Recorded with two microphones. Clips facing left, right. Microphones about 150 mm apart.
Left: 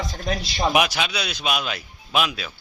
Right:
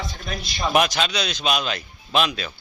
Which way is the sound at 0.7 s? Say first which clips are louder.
Right 4 dB; 10° left (ahead or behind).